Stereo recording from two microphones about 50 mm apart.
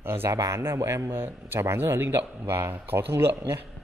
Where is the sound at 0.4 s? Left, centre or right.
Right.